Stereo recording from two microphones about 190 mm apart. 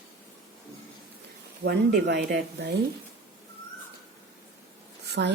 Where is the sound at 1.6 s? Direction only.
60° right (ahead or behind).